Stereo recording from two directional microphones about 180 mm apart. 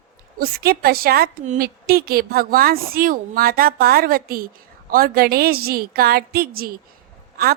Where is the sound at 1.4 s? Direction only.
40° right (ahead or behind).